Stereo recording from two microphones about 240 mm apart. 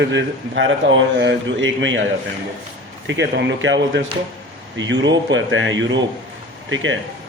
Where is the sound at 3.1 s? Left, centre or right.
Right.